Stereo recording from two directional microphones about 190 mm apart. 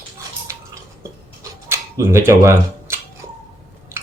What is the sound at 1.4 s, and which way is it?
Camera, 15° right (ahead or behind).